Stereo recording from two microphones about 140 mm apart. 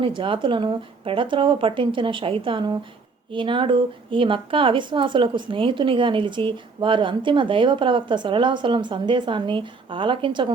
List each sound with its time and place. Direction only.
0.0 s speech: 40° right (ahead or behind)